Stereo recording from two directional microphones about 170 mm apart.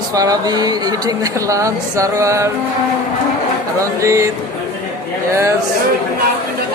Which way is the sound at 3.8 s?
15° right (ahead or behind).